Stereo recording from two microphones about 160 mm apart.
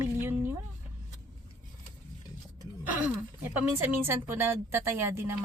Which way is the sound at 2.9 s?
10° right (ahead or behind).